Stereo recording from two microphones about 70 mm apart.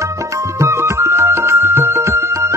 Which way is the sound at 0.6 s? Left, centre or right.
Right.